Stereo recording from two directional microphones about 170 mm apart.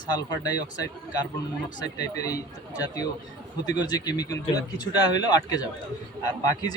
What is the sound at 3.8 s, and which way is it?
A man's voice, 25° left (ahead or behind).